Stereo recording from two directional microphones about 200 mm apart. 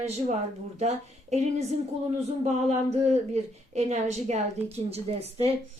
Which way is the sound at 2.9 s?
35° right (ahead or behind).